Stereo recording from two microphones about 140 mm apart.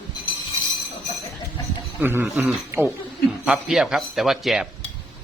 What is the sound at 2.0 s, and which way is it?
A man's voice, 15° right (ahead or behind).